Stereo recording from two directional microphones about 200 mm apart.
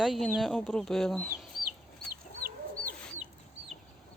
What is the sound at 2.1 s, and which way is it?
Chicken, 45° right (ahead or behind).